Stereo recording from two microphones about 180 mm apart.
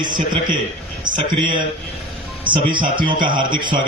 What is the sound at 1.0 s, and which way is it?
A man's voice, 25° right (ahead or behind).